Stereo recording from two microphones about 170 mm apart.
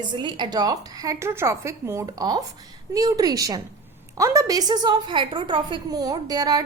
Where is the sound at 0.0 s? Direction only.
25° right (ahead or behind).